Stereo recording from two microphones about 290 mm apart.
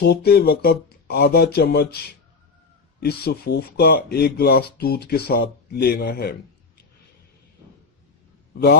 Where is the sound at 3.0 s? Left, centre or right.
Left.